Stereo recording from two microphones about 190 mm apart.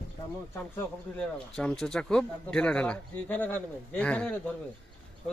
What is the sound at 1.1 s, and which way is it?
Speech, 5° left (ahead or behind).